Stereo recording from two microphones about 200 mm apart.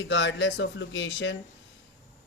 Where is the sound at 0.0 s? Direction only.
65° left (ahead or behind).